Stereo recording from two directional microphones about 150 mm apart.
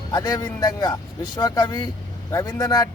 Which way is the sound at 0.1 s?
25° left (ahead or behind).